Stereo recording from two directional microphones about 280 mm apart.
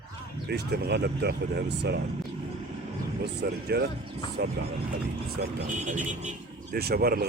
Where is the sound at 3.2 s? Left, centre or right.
Right.